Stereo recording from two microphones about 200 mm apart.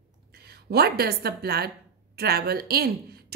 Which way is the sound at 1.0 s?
50° right (ahead or behind).